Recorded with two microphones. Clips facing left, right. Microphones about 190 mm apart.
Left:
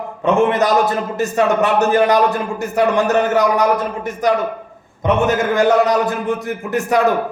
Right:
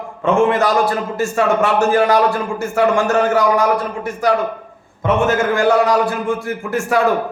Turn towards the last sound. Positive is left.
turn(degrees=20)  # may be behind; listen again after turning